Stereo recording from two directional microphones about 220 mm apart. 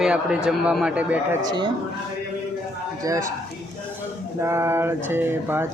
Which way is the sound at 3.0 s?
15° right (ahead or behind).